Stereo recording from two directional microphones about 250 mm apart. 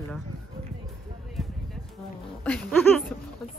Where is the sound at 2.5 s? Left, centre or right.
Centre.